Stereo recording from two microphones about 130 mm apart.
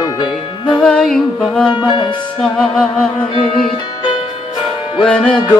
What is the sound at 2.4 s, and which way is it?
Music, 5° left (ahead or behind).